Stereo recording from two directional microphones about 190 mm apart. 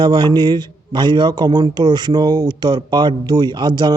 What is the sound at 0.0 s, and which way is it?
A man's voice, 25° right (ahead or behind).